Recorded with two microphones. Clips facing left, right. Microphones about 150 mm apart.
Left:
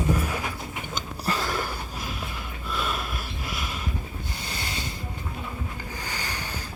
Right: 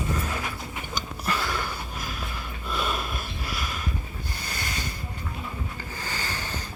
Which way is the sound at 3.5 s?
20° left (ahead or behind).